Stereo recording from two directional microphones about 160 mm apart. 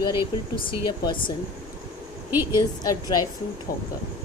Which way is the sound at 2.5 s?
25° left (ahead or behind).